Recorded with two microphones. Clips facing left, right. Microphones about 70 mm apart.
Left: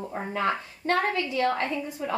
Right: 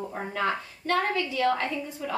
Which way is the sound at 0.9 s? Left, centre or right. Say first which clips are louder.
Left 1 dB; left.